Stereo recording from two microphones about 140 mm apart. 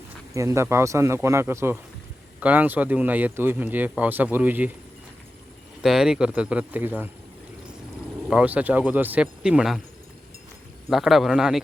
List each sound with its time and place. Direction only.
0.3 s speech: 20° right (ahead or behind)
5.8 s speech: 5° right (ahead or behind)
8.3 s speech: 10° right (ahead or behind)
10.8 s speech: centre (ahead or behind)